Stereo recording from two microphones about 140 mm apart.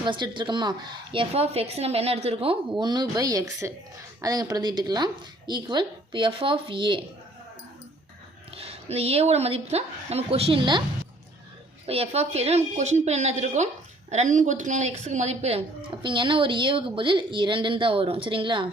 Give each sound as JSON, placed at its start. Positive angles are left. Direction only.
{"t": 0.0, "sound": "a woman's voice", "side_deg": -35}
{"t": 8.5, "sound": "a woman's voice", "side_deg": -45}
{"t": 11.9, "sound": "a woman's voice", "side_deg": -45}